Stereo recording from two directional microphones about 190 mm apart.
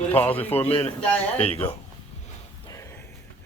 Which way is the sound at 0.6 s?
30° left (ahead or behind).